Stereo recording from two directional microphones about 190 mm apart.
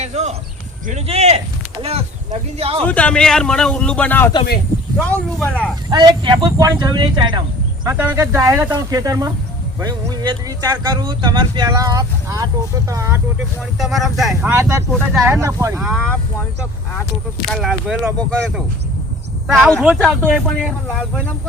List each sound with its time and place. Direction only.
0.0 s a sound: 35° right (ahead or behind)
0.9 s speech: 35° right (ahead or behind)
2.8 s a man's voice: 5° left (ahead or behind)
5.4 s a man's voice: 5° left (ahead or behind)
5.9 s speech: 25° right (ahead or behind)
7.9 s speech: 10° right (ahead or behind)
13.7 s a man's voice: centre (ahead or behind)
14.5 s speech: 15° right (ahead or behind)
14.9 s a man's voice: centre (ahead or behind)
15.3 s speech: 15° right (ahead or behind)
15.8 s a man's voice: centre (ahead or behind)
17.5 s a man's voice: centre (ahead or behind)